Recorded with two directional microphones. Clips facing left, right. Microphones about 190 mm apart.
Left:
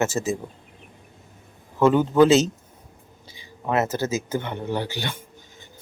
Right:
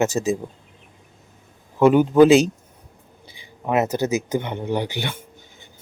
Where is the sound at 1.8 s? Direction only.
15° right (ahead or behind).